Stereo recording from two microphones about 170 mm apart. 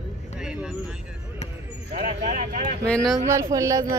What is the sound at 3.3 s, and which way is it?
Speech, 20° right (ahead or behind).